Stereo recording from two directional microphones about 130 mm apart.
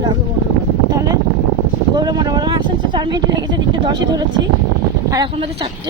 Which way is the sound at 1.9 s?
35° right (ahead or behind).